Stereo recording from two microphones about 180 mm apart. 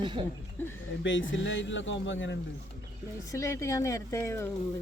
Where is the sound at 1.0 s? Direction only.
90° left.